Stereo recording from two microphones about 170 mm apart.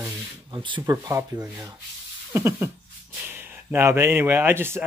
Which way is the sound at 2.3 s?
15° right (ahead or behind).